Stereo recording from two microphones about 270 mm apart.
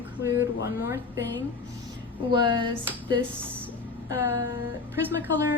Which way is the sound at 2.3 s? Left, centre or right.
Centre.